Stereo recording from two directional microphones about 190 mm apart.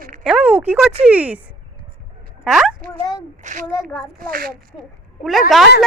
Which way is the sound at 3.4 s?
40° right (ahead or behind).